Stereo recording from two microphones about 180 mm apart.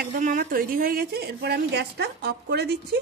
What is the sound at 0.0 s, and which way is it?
A woman's voice, 45° right (ahead or behind).